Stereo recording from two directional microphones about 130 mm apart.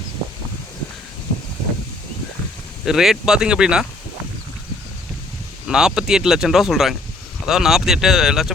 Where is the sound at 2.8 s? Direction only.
5° right (ahead or behind).